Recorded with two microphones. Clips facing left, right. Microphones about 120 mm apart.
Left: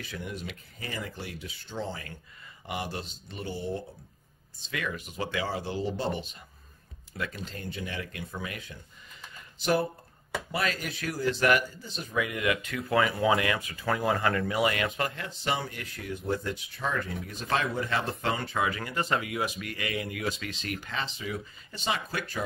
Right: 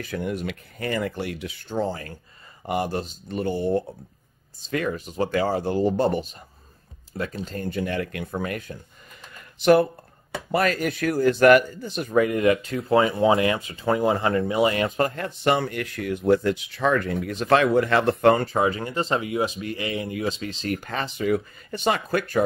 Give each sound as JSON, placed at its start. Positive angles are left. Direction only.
{"t": 0.0, "sound": "speech", "side_deg": -55}
{"t": 4.6, "sound": "speech", "side_deg": -40}
{"t": 9.6, "sound": "speech", "side_deg": -65}
{"t": 10.5, "sound": "speech", "side_deg": -50}
{"t": 12.2, "sound": "speech", "side_deg": -40}
{"t": 15.0, "sound": "speech", "side_deg": -50}
{"t": 18.4, "sound": "speech", "side_deg": -35}